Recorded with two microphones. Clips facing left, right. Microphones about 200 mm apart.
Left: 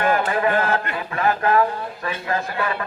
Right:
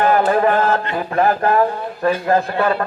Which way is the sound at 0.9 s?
40° right (ahead or behind).